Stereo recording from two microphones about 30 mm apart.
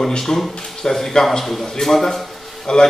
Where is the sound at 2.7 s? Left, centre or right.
Left.